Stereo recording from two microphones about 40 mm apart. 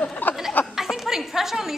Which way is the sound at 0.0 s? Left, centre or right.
Left.